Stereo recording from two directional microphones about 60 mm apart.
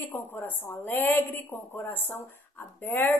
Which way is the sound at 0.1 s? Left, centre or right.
Left.